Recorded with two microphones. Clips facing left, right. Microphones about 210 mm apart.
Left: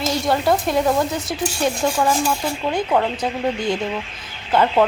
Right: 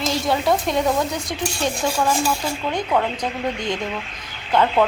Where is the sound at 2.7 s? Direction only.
5° left (ahead or behind).